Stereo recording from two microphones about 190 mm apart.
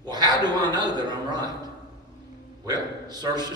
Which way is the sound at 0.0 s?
20° right (ahead or behind).